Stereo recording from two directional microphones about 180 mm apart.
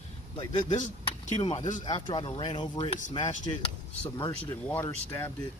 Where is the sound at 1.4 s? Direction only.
25° left (ahead or behind).